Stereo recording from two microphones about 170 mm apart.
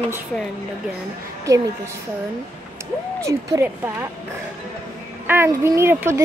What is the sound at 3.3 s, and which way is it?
Speech, 15° right (ahead or behind).